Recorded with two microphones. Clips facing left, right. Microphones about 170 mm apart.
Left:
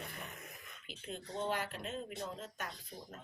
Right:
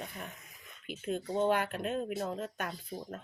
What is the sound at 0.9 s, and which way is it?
A woman's voice, 55° right (ahead or behind).